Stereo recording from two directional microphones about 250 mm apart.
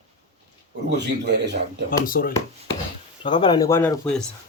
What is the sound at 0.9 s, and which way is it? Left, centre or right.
Speech, right.